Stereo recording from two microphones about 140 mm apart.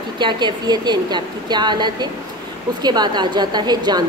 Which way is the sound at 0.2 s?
35° right (ahead or behind).